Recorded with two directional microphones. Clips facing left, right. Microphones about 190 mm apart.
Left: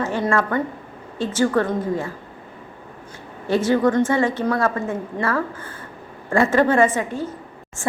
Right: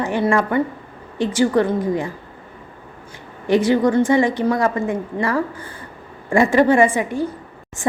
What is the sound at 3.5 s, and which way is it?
A woman's voice, 15° right (ahead or behind).